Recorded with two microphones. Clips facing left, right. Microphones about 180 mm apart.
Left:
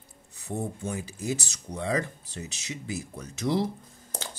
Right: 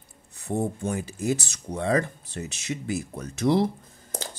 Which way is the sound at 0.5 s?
60° right (ahead or behind).